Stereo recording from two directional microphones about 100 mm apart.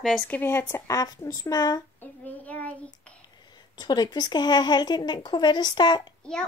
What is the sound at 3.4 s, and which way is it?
Speech, 45° left (ahead or behind).